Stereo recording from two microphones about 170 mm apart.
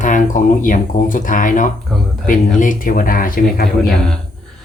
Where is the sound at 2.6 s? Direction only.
50° left (ahead or behind).